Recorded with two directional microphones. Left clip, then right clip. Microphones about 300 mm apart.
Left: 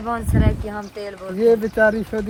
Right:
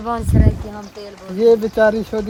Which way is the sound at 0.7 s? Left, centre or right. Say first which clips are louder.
Left 3 dB; left.